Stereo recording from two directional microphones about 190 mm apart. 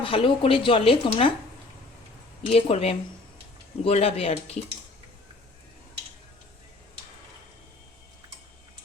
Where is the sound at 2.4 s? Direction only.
30° left (ahead or behind).